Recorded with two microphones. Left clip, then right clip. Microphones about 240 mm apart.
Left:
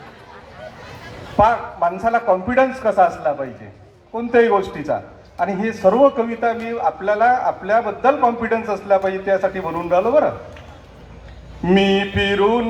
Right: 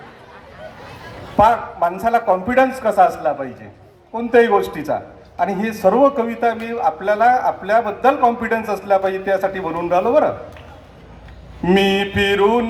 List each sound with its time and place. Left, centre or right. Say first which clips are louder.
1.4 s a man's voice: right 1 dB; right
11.6 s a man's voice: right 1 dB; right